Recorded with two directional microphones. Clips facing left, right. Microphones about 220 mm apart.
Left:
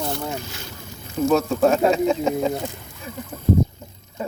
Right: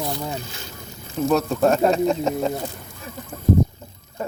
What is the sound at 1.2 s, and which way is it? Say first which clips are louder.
Speech: left 1 dB; centre (ahead or behind).